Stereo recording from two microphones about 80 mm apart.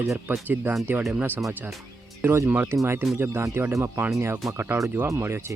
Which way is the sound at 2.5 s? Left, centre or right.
Right.